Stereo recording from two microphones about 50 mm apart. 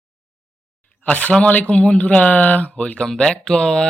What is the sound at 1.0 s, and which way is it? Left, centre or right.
Speech, left.